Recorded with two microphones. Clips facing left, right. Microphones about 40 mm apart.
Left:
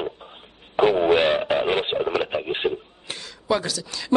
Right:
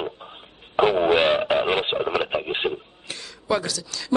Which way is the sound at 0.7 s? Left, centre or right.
Centre.